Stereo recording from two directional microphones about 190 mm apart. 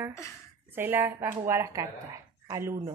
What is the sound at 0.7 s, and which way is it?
Speech, 10° right (ahead or behind).